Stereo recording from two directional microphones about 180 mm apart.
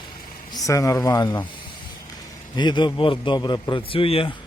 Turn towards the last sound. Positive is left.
turn(degrees=30)  # may be behind; listen again after turning